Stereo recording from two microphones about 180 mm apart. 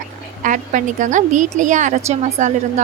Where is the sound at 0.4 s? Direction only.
45° right (ahead or behind).